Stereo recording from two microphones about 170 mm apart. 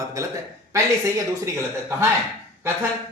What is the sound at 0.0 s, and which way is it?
Speech, 20° right (ahead or behind).